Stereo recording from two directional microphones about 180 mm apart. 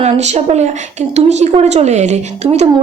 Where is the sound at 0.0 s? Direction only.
40° right (ahead or behind).